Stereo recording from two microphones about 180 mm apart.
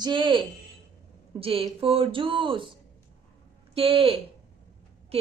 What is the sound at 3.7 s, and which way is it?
Speech, 30° right (ahead or behind).